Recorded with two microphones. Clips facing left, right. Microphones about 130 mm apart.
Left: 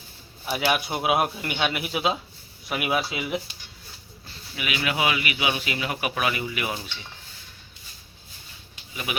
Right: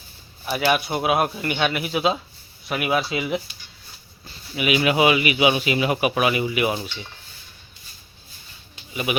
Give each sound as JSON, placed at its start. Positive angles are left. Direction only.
{"t": 0.4, "sound": "speech", "side_deg": 5}
{"t": 4.5, "sound": "speech", "side_deg": -20}
{"t": 9.1, "sound": "speech", "side_deg": -15}